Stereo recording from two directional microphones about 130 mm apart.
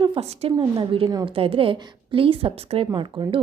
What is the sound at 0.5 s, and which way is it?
A woman's voice, 35° right (ahead or behind).